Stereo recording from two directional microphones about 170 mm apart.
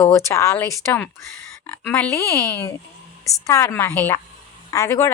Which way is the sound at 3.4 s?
15° left (ahead or behind).